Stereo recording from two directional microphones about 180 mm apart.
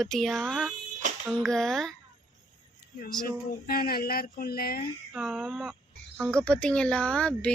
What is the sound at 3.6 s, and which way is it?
Speech, 55° left (ahead or behind).